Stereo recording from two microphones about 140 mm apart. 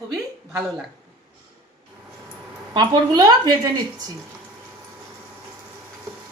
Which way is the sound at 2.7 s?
30° right (ahead or behind).